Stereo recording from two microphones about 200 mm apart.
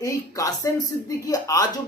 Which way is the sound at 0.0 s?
15° left (ahead or behind).